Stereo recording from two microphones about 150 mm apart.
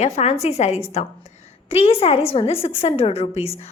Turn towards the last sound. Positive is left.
turn(degrees=40)  # may be behind; listen again after turning